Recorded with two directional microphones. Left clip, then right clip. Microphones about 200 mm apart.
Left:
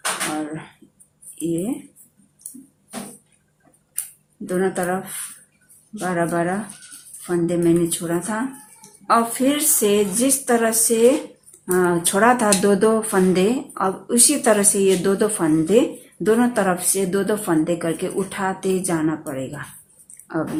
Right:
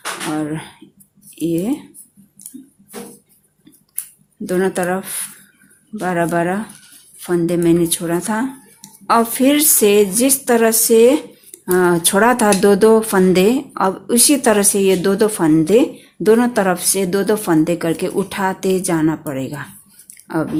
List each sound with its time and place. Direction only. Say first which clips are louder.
0.3 s speech: right 5 dB; 40° right (ahead or behind)
4.4 s speech: right 4 dB; 40° right (ahead or behind)